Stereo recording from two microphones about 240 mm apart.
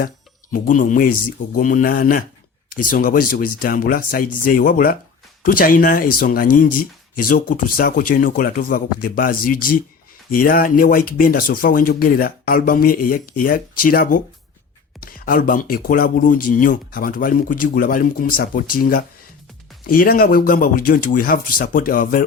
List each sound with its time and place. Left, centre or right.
0.5 s speech: left